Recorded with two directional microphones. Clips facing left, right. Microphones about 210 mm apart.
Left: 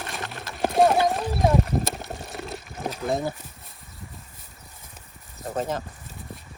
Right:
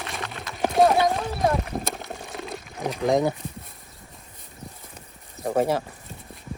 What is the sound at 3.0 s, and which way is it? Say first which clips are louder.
Speech: right 6 dB; 90° right.